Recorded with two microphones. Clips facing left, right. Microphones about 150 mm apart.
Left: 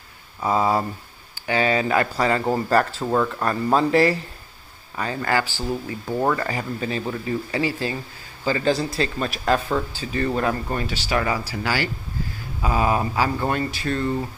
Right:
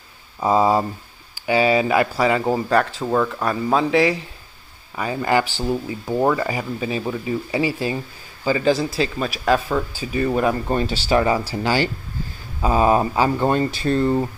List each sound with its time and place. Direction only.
0.4 s speech: 20° right (ahead or behind)
2.7 s speech: 5° left (ahead or behind)
4.9 s speech: 15° right (ahead or behind)
9.9 s speech: 10° right (ahead or behind)
10.5 s speech: 25° right (ahead or behind)